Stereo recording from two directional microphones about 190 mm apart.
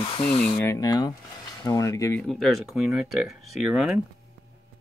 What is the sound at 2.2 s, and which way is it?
Speech, centre (ahead or behind).